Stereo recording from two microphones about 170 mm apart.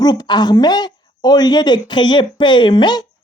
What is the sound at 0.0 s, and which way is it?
Speech, 25° left (ahead or behind).